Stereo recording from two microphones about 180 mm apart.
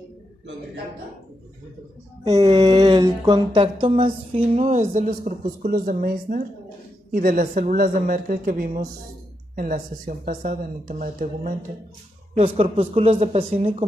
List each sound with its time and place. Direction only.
2.2 s a woman's voice: 20° right (ahead or behind); by 11.5 s 50° right (ahead or behind)
12.4 s speech: 30° right (ahead or behind)